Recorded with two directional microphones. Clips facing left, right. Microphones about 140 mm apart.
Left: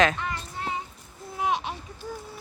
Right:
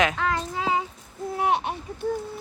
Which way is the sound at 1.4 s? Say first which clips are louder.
Right 3 dB; 60° right (ahead or behind).